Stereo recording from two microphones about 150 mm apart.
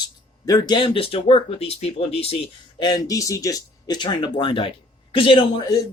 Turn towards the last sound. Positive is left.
turn(degrees=30)  # may be behind; listen again after turning